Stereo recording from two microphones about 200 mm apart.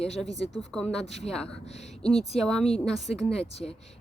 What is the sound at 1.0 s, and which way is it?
Speech, 35° left (ahead or behind).